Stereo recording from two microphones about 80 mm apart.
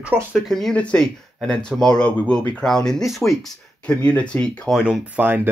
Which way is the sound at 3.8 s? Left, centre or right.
Centre.